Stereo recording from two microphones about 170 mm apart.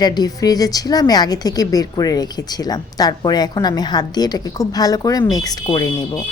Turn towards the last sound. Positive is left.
turn(degrees=20)  # may be behind; listen again after turning